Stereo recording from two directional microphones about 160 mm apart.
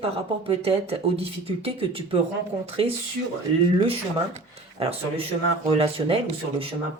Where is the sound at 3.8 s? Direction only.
35° right (ahead or behind).